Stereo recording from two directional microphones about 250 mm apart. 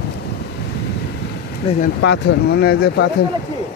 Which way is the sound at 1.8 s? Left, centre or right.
Left.